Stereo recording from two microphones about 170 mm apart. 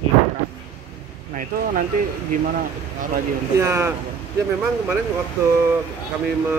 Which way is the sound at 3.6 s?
15° right (ahead or behind).